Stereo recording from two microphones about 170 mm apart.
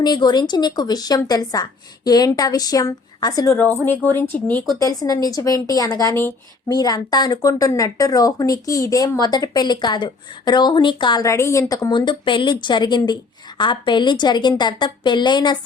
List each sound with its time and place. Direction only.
0.0 s a woman's voice: 25° left (ahead or behind)
3.8 s speech: 10° left (ahead or behind)
4.8 s a woman's voice: 20° left (ahead or behind)